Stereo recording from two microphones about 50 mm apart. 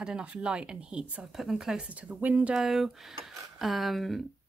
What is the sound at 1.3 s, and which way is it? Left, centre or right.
Speech, centre.